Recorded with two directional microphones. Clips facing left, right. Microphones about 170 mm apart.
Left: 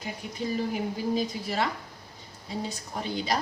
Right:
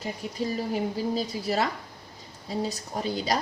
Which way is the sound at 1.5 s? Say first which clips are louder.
Right 3 dB; 40° right (ahead or behind).